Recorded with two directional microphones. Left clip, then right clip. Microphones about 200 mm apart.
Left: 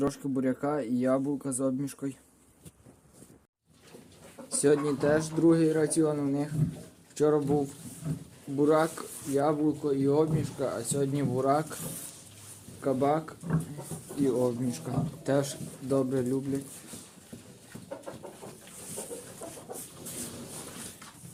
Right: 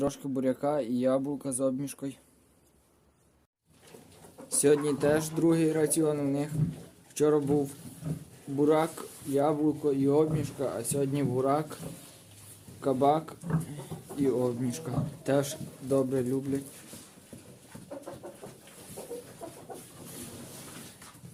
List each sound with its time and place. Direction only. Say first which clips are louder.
0.0 s speech: even; 5° right (ahead or behind)
4.5 s speech: right 1 dB; 10° right (ahead or behind)
12.8 s speech: right 2 dB; 15° right (ahead or behind)
14.3 s speech: left 1 dB; 5° right (ahead or behind)